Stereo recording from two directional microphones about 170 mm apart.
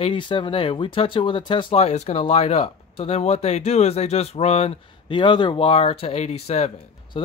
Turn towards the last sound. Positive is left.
turn(degrees=40)  # may be behind; listen again after turning